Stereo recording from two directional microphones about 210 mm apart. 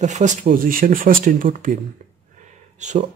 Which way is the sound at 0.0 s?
35° right (ahead or behind).